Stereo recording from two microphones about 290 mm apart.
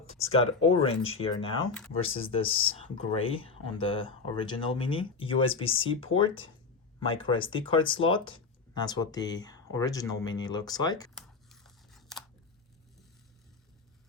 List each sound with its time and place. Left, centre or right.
0.7 s speech: centre
11.1 s scissors: centre